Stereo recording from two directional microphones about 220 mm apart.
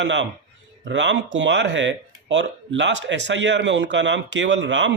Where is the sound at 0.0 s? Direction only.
55° right (ahead or behind).